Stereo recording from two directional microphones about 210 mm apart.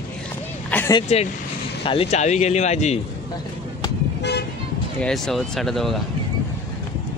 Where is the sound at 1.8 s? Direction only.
25° left (ahead or behind).